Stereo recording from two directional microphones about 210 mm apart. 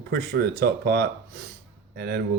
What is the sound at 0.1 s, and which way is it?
Speech, 50° right (ahead or behind).